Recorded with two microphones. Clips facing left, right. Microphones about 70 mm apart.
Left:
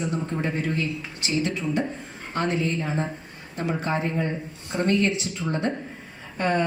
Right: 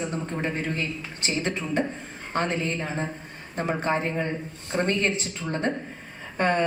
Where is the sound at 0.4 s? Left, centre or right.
Right.